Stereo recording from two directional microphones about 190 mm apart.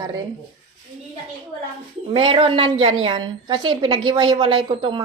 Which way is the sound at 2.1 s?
30° right (ahead or behind).